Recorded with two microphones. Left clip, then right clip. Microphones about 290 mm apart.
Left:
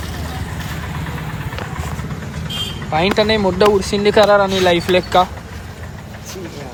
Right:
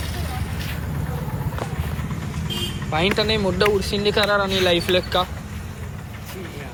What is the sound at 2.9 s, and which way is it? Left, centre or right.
Speech, centre.